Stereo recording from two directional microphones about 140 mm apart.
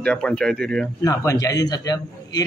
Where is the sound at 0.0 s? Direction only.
5° left (ahead or behind).